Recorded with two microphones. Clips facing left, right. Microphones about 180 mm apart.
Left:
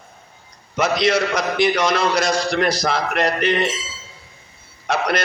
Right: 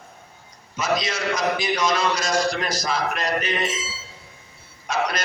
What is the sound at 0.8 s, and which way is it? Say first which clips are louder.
A man's voice: left 7 dB; 65° left (ahead or behind).